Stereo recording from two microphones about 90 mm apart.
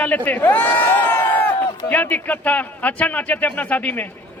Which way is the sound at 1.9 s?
15° left (ahead or behind).